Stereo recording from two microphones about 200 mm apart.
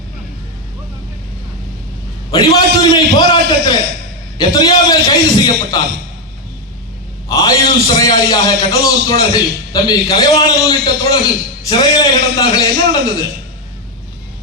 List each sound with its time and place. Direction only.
2.3 s a man's voice: 20° left (ahead or behind)
7.3 s a man's voice: 15° left (ahead or behind)